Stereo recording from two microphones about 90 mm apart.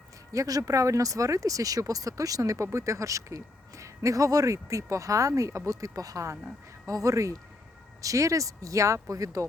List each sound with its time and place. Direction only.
0.3 s speech: 40° right (ahead or behind)